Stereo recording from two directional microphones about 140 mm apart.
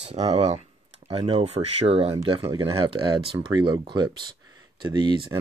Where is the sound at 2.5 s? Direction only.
30° right (ahead or behind).